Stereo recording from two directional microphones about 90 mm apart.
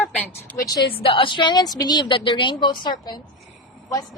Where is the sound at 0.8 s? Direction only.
80° left; by 2.9 s 60° left (ahead or behind).